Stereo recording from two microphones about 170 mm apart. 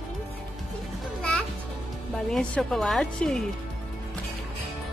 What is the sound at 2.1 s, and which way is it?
A child's voice, 5° left (ahead or behind).